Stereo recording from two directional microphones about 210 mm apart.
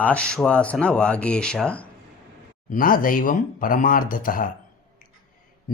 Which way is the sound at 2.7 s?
40° left (ahead or behind).